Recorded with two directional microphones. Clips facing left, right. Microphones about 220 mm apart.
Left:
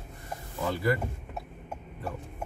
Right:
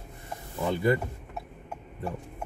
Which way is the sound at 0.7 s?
25° right (ahead or behind).